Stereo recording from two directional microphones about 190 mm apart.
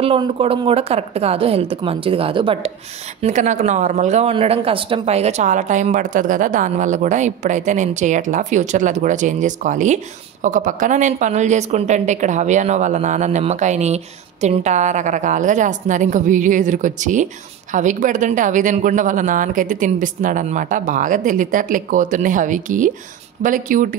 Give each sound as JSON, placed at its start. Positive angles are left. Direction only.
{"t": 0.0, "sound": "a woman's voice", "side_deg": -30}
{"t": 3.2, "sound": "a woman's voice", "side_deg": -40}